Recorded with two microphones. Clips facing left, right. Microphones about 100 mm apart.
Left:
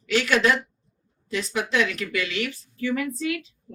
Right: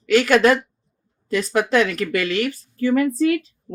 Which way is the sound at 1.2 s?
45° right (ahead or behind).